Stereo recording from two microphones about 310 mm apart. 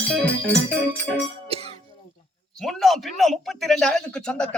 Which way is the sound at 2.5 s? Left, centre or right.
Centre.